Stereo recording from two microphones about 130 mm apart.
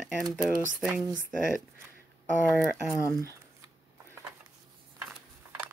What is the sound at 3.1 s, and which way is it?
Speech, 20° left (ahead or behind).